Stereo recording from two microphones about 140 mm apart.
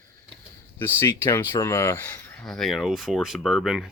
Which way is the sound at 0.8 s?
15° left (ahead or behind).